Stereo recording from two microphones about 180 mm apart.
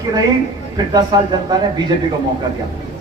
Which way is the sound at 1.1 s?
25° right (ahead or behind).